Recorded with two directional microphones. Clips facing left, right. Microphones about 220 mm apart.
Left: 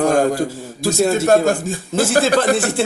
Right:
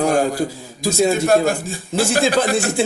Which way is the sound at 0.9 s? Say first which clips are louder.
Even; 5° left (ahead or behind).